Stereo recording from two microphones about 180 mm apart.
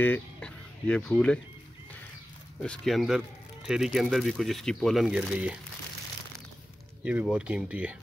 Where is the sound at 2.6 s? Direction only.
5° left (ahead or behind).